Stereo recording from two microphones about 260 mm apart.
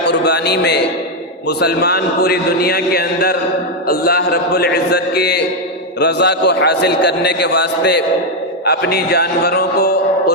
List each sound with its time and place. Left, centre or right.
0.1 s a man's voice: left